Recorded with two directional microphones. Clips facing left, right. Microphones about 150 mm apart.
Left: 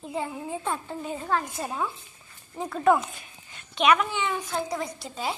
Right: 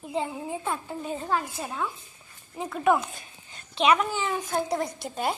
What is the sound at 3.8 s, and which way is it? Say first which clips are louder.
Speech: even; 35° right (ahead or behind).